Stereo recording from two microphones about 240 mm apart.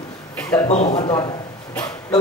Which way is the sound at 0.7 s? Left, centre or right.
Left.